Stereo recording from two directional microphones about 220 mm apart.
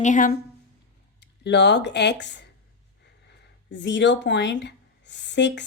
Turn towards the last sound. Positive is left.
turn(degrees=55)  # may be behind; listen again after turning